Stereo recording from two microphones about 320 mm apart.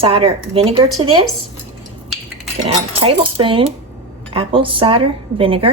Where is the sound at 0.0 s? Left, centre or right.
Centre.